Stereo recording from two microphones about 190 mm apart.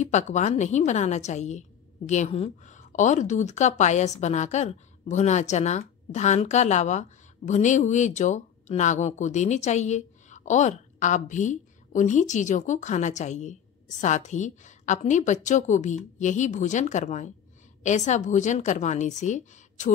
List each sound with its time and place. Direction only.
0.0 s a woman's voice: 40° left (ahead or behind)